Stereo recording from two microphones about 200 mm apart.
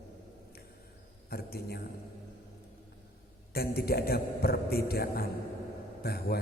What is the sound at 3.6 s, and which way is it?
A man's voice, 50° left (ahead or behind).